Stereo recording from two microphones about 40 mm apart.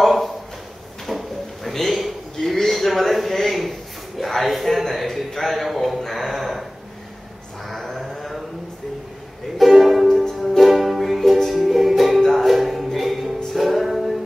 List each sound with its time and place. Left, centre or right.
0.0 s a sound: centre
7.7 s music: centre
9.6 s music: centre